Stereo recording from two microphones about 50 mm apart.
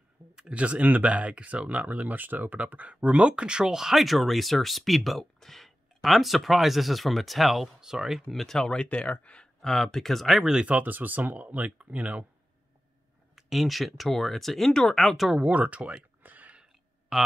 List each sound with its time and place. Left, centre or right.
0.4 s speech: right; by 8.2 s centre
8.3 s speech: centre; by 9.5 s left
9.6 s speech: centre
10.4 s speech: centre
10.7 s speech: right
13.4 s speech: centre
14.7 s speech: centre
15.0 s speech: centre
15.4 s speech: right
16.2 s a sound: right